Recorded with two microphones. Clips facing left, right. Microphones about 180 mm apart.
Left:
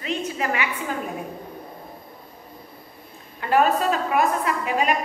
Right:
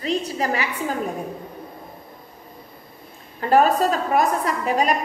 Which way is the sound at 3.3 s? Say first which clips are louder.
Right 3 dB; 40° right (ahead or behind).